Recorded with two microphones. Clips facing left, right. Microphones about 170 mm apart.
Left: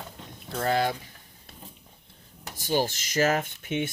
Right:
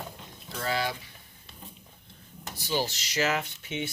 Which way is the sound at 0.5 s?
50° left (ahead or behind).